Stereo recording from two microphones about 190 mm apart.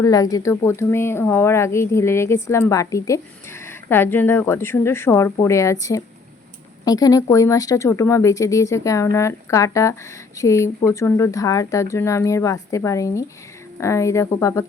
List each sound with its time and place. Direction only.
0.0 s speech: 20° left (ahead or behind)